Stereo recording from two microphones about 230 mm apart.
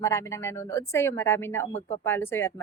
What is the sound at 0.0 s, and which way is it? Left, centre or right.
Speech, centre.